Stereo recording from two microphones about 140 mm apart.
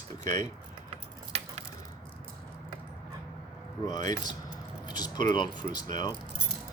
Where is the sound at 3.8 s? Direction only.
30° left (ahead or behind).